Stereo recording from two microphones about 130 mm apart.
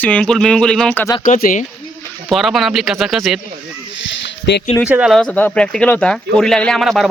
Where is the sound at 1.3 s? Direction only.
90° left.